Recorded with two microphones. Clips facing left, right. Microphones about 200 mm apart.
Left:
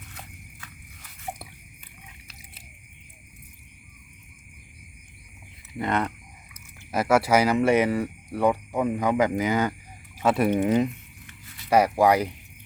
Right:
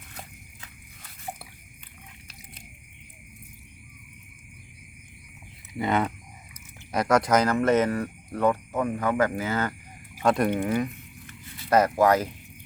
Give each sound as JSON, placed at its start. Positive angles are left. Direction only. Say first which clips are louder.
{"t": 5.7, "sound": "speech", "louder": "right 1 dB", "side_deg": -5}
{"t": 6.9, "sound": "speech", "louder": "left 1 dB", "side_deg": 5}
{"t": 10.5, "sound": "speech", "louder": "left 4 dB", "side_deg": 20}